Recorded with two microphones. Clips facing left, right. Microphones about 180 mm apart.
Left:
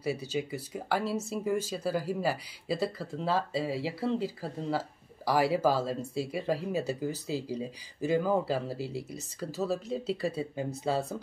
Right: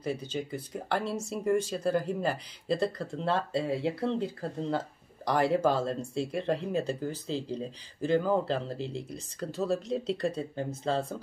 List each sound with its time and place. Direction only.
0.0 s speech: 10° left (ahead or behind)